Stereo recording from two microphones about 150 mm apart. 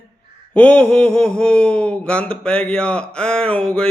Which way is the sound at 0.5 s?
10° left (ahead or behind).